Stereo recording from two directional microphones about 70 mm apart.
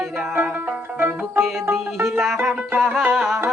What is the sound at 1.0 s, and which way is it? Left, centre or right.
Music, right.